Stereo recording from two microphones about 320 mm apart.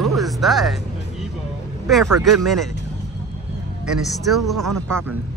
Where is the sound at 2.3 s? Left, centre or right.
Centre.